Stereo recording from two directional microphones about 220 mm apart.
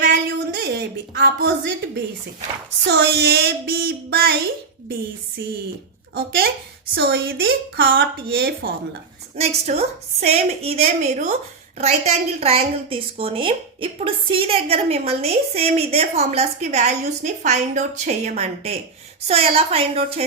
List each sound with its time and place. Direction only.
0.0 s a sound: 50° right (ahead or behind)
2.9 s a woman's voice: 50° right (ahead or behind)
6.1 s a woman's voice: 45° right (ahead or behind)
9.3 s a woman's voice: 30° right (ahead or behind)